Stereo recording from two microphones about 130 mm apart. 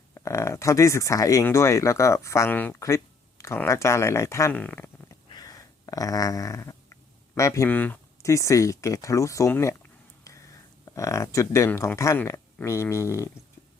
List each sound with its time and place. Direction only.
0.1 s speech: 25° left (ahead or behind)
4.5 s speech: 10° left (ahead or behind)
5.3 s a sound: 30° left (ahead or behind)
7.3 s speech: 25° left (ahead or behind)
7.7 s speech: 10° left (ahead or behind)
8.2 s speech: 25° left (ahead or behind)
10.8 s speech: 25° left (ahead or behind)